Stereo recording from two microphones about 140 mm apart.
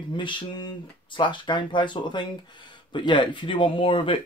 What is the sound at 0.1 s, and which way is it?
Speech, 35° left (ahead or behind).